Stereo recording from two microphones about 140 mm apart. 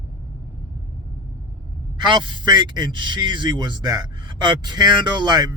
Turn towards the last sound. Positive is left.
turn(degrees=-30)  # may be behind; listen again after turning